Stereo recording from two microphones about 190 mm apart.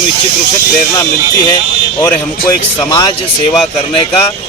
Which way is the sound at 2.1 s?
15° left (ahead or behind).